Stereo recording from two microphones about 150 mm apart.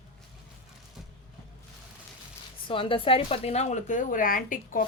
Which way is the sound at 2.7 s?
35° left (ahead or behind).